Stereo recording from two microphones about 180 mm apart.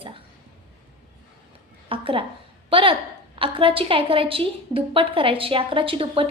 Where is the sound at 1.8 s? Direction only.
30° right (ahead or behind).